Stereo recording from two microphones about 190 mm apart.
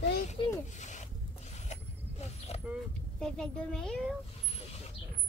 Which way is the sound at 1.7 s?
35° left (ahead or behind).